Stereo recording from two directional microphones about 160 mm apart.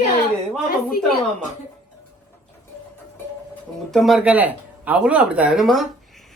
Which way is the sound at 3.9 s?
Centre (ahead or behind).